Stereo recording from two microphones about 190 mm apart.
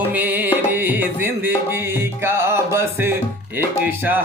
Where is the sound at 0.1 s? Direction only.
10° right (ahead or behind).